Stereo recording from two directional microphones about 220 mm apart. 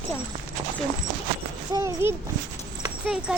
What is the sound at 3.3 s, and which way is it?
Speech, 5° right (ahead or behind).